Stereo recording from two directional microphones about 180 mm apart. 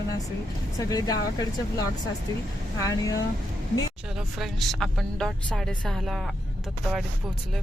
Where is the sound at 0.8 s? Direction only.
20° left (ahead or behind).